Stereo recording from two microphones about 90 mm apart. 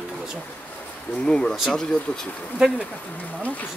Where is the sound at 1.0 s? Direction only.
10° left (ahead or behind).